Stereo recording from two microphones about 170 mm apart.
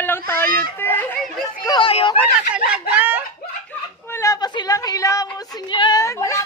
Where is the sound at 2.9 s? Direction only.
10° right (ahead or behind).